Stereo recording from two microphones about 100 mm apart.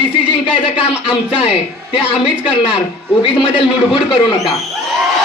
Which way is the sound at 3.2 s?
60° left (ahead or behind).